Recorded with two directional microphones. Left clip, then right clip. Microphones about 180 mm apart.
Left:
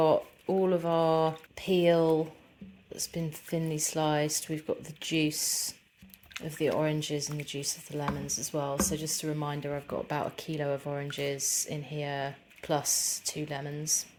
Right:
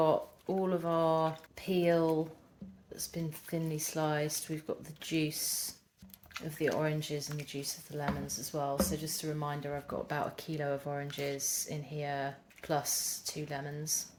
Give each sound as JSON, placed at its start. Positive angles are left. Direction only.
{"t": 0.0, "sound": "speech", "side_deg": 40}